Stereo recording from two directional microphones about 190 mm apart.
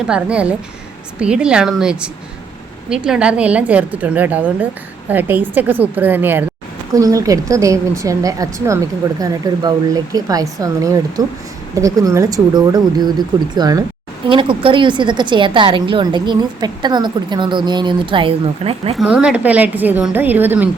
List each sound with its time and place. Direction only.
0.1 s a woman's voice: 5° right (ahead or behind); by 18.9 s 30° right (ahead or behind)
18.9 s speech: 5° right (ahead or behind)